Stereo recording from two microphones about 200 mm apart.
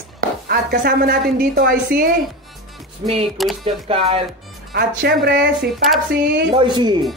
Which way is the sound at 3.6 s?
30° right (ahead or behind).